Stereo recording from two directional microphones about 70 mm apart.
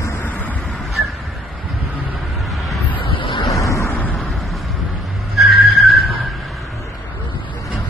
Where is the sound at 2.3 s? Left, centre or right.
Centre.